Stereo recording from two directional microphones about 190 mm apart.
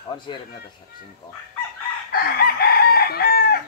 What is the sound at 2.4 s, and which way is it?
Chicken, 55° left (ahead or behind).